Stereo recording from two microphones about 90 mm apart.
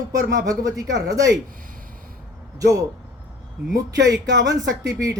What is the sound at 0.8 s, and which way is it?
Speech, 40° right (ahead or behind).